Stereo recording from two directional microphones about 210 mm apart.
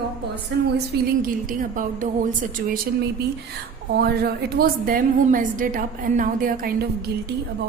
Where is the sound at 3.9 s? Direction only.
50° right (ahead or behind).